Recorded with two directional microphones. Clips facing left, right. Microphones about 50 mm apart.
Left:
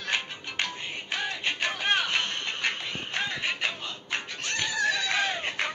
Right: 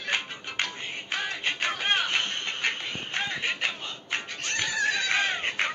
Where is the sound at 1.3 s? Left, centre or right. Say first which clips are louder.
Right 1 dB; right.